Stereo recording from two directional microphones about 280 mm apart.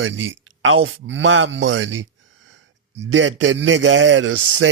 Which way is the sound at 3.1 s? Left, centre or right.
Right.